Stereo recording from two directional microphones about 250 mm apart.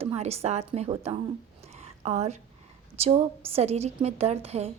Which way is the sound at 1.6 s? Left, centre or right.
Right.